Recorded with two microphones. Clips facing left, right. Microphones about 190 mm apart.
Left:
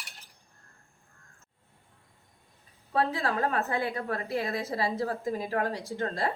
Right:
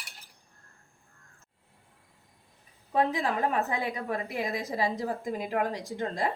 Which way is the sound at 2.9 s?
15° right (ahead or behind).